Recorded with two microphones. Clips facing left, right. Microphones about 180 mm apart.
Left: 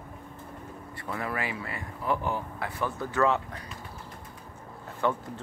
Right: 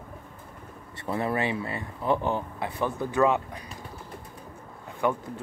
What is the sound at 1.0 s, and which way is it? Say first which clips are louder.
Speech: right 6 dB; 25° right (ahead or behind).